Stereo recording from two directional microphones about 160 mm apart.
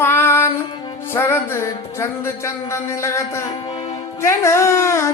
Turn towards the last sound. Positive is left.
turn(degrees=15)  # may be behind; listen again after turning